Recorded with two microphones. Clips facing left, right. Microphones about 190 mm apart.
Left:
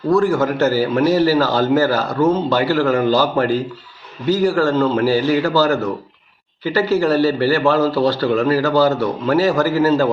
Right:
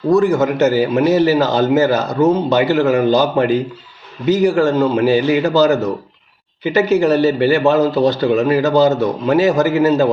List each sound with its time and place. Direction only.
0.1 s a man's voice: 20° right (ahead or behind)